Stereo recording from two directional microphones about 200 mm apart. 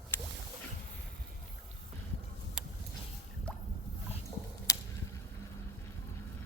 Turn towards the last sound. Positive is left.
turn(degrees=15)  # may be behind; listen again after turning